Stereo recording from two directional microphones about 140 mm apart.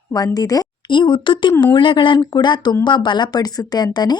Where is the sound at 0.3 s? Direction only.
25° left (ahead or behind).